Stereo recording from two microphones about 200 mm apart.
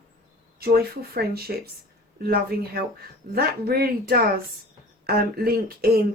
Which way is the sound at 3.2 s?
50° right (ahead or behind).